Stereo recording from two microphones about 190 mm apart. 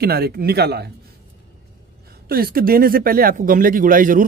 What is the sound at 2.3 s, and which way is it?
Speech, 50° right (ahead or behind).